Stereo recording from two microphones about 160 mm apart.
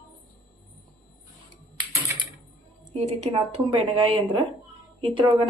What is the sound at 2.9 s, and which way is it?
Speech, 40° right (ahead or behind).